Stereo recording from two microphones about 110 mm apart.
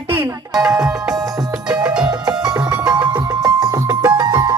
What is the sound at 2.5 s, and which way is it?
Music, 25° right (ahead or behind).